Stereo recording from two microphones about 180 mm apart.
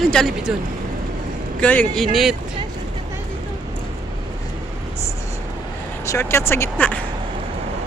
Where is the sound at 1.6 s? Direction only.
10° left (ahead or behind).